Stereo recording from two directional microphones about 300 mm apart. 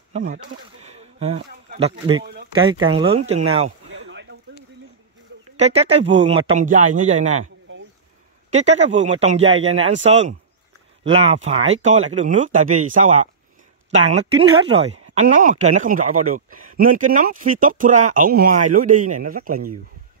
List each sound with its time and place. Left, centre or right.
0.1 s speech: right
0.8 s a sound: right
2.5 s speech: centre
3.9 s a sound: right
5.6 s speech: right
8.5 s speech: right
14.7 s speech: centre